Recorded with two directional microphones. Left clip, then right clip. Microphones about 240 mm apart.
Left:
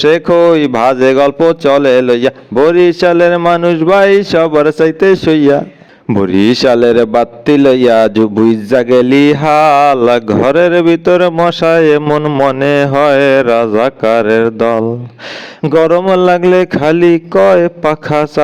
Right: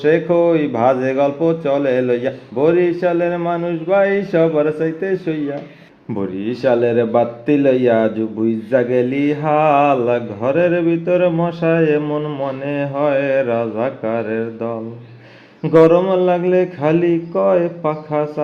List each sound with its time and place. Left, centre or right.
0.0 s a man's voice: left
8.7 s mantra: left